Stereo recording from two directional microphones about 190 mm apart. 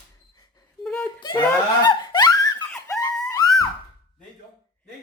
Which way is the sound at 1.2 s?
20° left (ahead or behind).